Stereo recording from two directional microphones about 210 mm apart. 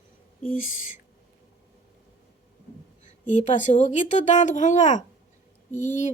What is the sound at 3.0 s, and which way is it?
A woman's voice, 35° left (ahead or behind).